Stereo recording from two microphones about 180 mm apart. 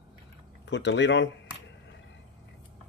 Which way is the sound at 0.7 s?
75° left (ahead or behind).